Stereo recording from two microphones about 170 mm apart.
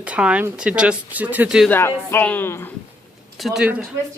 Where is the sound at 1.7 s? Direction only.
15° left (ahead or behind).